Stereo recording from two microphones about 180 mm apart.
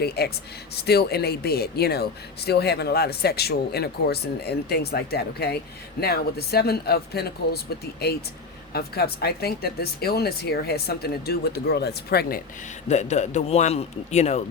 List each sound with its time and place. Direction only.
0.2 s speech: 65° left (ahead or behind)
8.7 s speech: 60° left (ahead or behind)
12.9 s a man's voice: 40° left (ahead or behind)